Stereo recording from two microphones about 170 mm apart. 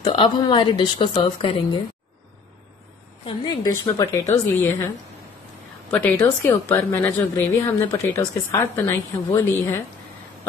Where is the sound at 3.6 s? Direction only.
20° left (ahead or behind).